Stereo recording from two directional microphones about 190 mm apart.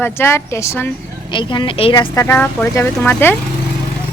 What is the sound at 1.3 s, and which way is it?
Speech, 25° left (ahead or behind).